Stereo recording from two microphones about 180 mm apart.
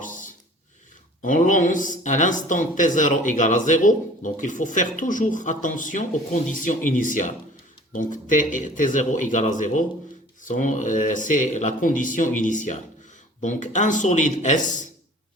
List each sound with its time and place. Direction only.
1.2 s speech: 45° left (ahead or behind)